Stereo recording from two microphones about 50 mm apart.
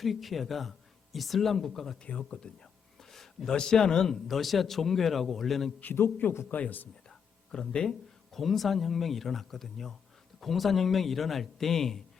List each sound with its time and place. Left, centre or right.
0.0 s a man's voice: centre
2.0 s speech: left
3.0 s a sound: centre
3.5 s a man's voice: centre
5.8 s a man's voice: left
6.5 s speech: left
7.1 s a sound: centre
7.9 s a man's voice: centre